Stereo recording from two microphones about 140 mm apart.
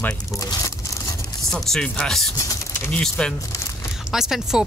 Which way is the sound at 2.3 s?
25° left (ahead or behind).